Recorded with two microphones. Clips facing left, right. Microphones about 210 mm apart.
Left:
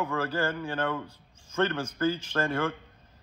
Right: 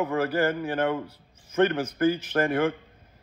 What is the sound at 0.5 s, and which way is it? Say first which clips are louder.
Speech: right 5 dB; 45° right (ahead or behind).